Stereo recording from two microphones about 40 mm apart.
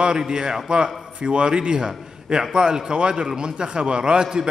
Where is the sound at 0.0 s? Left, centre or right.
Right.